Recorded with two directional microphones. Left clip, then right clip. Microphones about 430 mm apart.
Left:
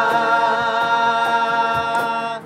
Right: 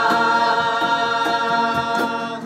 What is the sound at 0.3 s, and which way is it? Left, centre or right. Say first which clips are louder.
Music: even; centre.